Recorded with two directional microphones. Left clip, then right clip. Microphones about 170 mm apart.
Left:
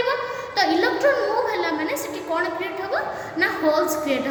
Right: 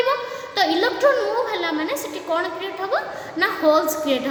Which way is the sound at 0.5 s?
40° right (ahead or behind).